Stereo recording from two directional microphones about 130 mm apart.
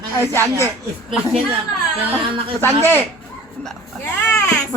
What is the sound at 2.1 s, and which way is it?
Speech, 45° right (ahead or behind).